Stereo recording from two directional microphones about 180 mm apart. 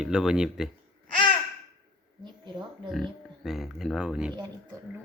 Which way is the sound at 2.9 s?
Centre (ahead or behind).